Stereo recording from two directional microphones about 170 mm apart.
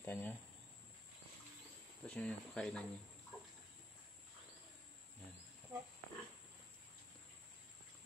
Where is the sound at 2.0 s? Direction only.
5° left (ahead or behind).